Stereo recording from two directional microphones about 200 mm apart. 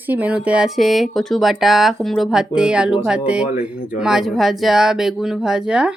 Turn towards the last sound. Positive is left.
turn(degrees=-5)  # may be behind; listen again after turning